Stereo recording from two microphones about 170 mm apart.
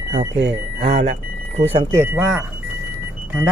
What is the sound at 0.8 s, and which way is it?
Speech, 35° right (ahead or behind).